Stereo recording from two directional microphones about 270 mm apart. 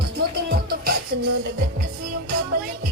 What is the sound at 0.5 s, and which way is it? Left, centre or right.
Music, right.